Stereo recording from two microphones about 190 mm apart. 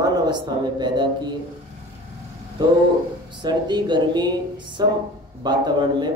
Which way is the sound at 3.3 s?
25° right (ahead or behind).